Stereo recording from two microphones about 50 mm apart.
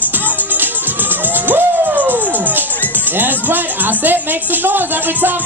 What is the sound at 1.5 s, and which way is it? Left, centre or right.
Music, right.